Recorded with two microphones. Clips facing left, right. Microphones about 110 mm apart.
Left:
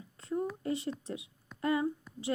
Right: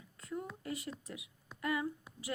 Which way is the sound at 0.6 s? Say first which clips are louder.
Left 8 dB; 30° left (ahead or behind).